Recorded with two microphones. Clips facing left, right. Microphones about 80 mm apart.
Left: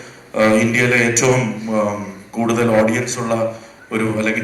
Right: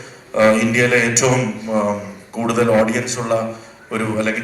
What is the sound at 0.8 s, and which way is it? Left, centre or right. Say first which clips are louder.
A man's voice: even; right.